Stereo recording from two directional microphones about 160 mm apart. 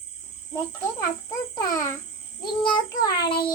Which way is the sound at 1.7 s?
20° left (ahead or behind).